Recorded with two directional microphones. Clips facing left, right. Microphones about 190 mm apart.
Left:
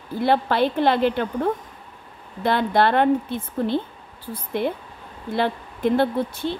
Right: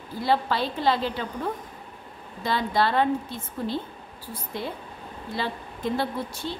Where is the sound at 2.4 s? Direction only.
60° left (ahead or behind).